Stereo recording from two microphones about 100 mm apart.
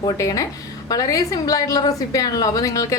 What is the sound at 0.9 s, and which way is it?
A woman's voice, 35° left (ahead or behind).